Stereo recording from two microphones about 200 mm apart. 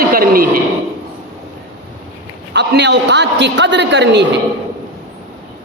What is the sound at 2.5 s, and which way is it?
A man's voice, 60° right (ahead or behind).